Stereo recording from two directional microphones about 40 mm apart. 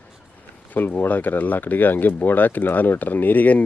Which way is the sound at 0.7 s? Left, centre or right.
Left.